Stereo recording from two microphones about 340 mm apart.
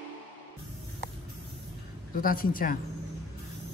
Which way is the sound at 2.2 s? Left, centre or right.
Left.